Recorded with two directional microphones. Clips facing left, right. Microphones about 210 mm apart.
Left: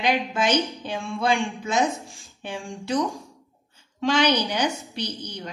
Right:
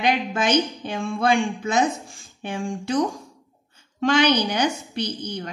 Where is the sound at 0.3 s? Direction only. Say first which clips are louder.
Right 2 dB; 55° right (ahead or behind).